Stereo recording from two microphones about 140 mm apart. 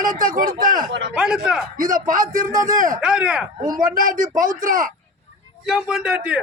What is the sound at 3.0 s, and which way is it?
Speech, 5° right (ahead or behind).